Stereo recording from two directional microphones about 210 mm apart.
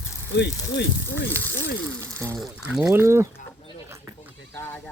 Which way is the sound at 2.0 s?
15° right (ahead or behind).